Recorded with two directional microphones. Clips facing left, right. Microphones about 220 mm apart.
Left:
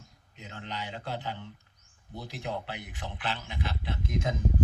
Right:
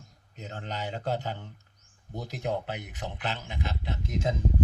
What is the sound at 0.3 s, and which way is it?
A man's voice, 40° right (ahead or behind).